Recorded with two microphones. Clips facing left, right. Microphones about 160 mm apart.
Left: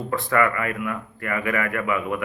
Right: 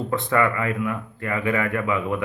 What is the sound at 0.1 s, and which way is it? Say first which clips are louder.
Speech: even; 25° right (ahead or behind).